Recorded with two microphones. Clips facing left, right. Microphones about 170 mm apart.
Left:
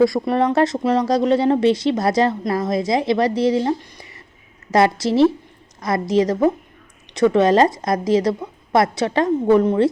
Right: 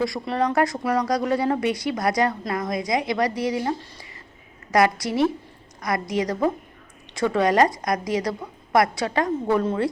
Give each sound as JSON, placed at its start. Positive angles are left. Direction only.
{"t": 0.3, "sound": "speech", "side_deg": 25}